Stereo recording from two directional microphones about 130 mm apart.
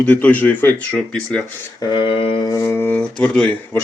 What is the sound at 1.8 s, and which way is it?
Mantra, 35° left (ahead or behind).